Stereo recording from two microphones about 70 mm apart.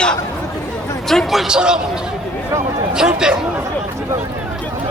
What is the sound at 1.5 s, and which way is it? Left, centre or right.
Speech, centre.